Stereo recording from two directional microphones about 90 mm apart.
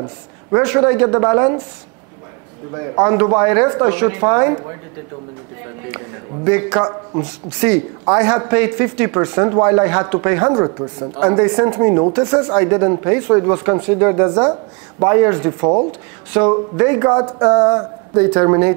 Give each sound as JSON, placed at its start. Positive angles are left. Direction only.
{"t": 0.0, "sound": "speech", "side_deg": -25}
{"t": 2.7, "sound": "speech", "side_deg": -25}
{"t": 5.9, "sound": "speech", "side_deg": -20}